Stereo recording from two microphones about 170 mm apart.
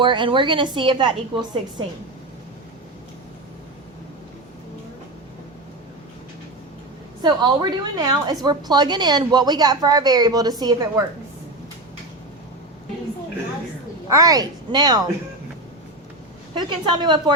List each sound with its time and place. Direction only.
0.0 s a woman's voice: 30° right (ahead or behind)
7.2 s a woman's voice: 25° right (ahead or behind)
14.1 s a woman's voice: 20° right (ahead or behind)
16.6 s a woman's voice: 25° right (ahead or behind)